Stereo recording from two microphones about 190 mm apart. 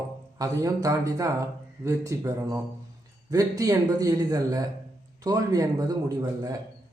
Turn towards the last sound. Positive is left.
turn(degrees=-20)  # may be behind; listen again after turning